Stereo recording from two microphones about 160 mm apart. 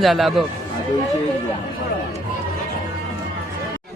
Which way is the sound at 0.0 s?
Centre (ahead or behind).